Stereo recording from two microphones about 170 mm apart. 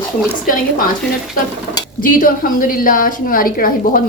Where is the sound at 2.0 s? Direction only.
55° left (ahead or behind).